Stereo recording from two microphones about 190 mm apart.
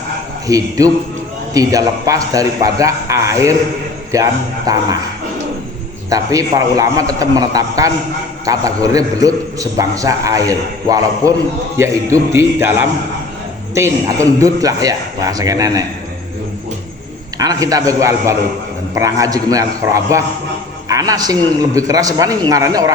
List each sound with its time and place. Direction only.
0.4 s a man's voice: 20° right (ahead or behind)
6.1 s a man's voice: 20° right (ahead or behind)
13.7 s a man's voice: 15° right (ahead or behind)
17.3 s a man's voice: 20° right (ahead or behind)